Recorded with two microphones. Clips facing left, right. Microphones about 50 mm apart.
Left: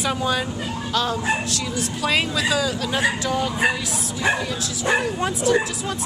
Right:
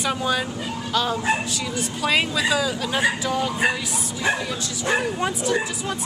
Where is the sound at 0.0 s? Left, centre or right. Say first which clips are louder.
Left 1 dB; centre.